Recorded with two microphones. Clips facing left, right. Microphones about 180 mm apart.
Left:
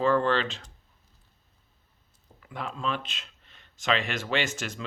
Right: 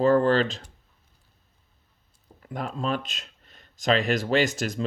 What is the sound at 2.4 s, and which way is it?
Speech, 45° right (ahead or behind).